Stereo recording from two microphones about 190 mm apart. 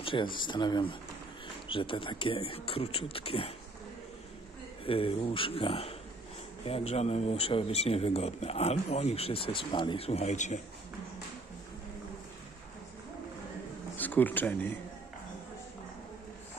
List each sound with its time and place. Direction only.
0.0 s speech: 25° left (ahead or behind)
4.8 s speech: 30° left (ahead or behind)
13.9 s speech: 10° left (ahead or behind)